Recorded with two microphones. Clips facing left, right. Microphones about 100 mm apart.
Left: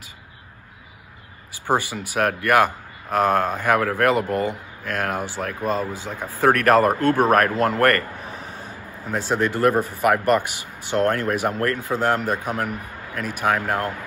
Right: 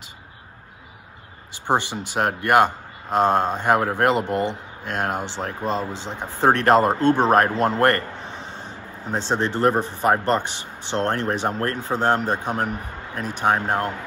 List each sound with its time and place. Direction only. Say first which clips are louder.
1.7 s speech: even; 25° right (ahead or behind)